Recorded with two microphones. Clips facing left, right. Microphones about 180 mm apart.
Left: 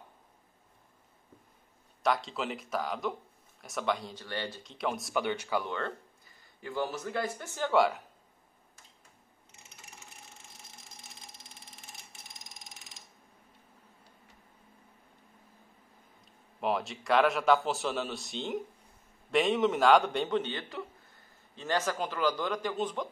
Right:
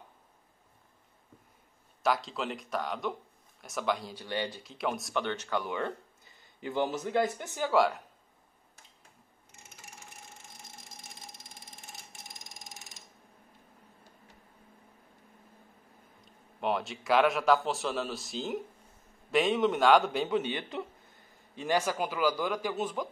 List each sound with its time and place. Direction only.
2.0 s a man's voice: centre (ahead or behind)
4.2 s a man's voice: 15° right (ahead or behind)
4.6 s a man's voice: centre (ahead or behind)
5.2 s speech: 10° left (ahead or behind)
5.7 s a man's voice: 15° right (ahead or behind)
7.6 s a man's voice: centre (ahead or behind)
16.5 s a man's voice: centre (ahead or behind)